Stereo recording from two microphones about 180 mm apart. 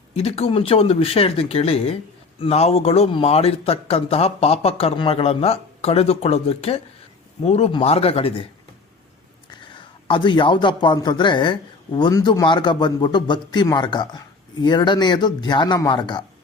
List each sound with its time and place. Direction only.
0.1 s a man's voice: 35° left (ahead or behind)
10.1 s speech: 25° left (ahead or behind)